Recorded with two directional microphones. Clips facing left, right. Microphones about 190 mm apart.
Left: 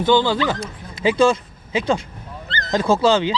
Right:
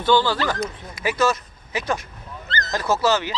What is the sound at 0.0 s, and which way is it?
Speech, 20° left (ahead or behind).